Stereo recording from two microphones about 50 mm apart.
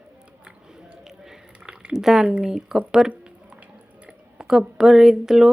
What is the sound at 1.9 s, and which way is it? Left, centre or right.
Speech, centre.